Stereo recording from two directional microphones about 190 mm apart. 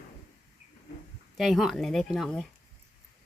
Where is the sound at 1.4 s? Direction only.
Centre (ahead or behind).